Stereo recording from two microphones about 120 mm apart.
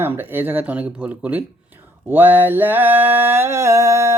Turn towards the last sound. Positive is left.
turn(degrees=-25)  # may be behind; listen again after turning